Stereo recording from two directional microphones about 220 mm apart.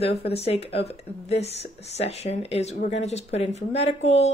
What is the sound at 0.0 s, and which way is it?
Speech, 25° left (ahead or behind).